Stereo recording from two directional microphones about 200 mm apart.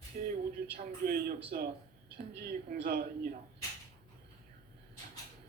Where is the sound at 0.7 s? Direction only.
50° right (ahead or behind).